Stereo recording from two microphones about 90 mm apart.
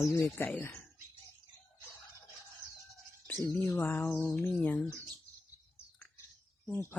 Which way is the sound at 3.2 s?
20° left (ahead or behind).